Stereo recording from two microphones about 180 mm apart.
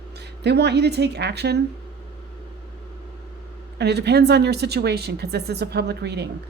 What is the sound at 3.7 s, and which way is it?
A woman's voice, 70° right (ahead or behind).